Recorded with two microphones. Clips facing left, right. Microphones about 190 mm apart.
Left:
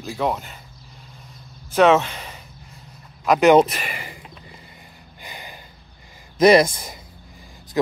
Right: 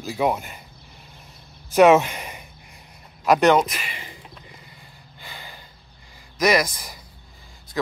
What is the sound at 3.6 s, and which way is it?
Speech, 35° left (ahead or behind).